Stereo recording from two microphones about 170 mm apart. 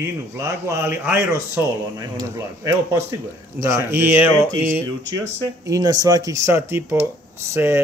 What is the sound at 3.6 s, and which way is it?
Speech, 15° right (ahead or behind).